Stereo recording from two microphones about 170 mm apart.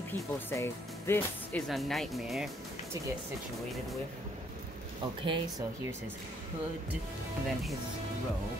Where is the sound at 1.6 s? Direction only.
Centre (ahead or behind).